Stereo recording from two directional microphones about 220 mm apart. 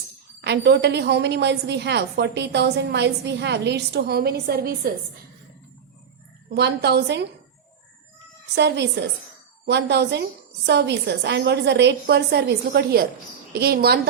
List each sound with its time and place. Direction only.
0.4 s a woman's voice: 50° right (ahead or behind)
6.5 s a woman's voice: 50° right (ahead or behind)
8.5 s a woman's voice: 50° right (ahead or behind)